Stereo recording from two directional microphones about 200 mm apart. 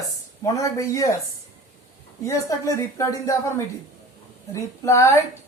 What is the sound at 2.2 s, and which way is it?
Speech, 15° left (ahead or behind).